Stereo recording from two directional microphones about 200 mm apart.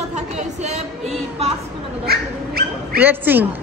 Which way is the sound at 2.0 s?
50° right (ahead or behind).